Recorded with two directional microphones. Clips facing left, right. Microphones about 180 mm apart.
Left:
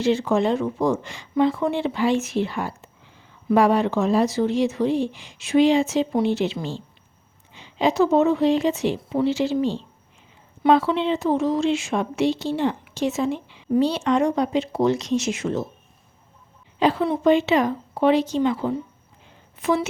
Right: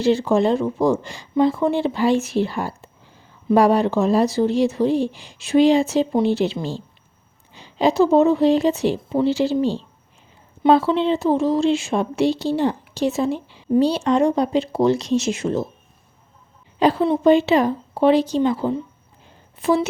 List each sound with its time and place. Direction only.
0.0 s speech: 35° right (ahead or behind)
16.8 s a woman's voice: 35° right (ahead or behind)